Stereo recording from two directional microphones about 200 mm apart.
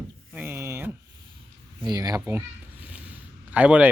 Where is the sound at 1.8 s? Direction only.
20° right (ahead or behind).